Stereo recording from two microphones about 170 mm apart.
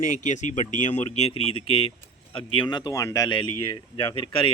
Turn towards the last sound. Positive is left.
turn(degrees=30)  # may be behind; listen again after turning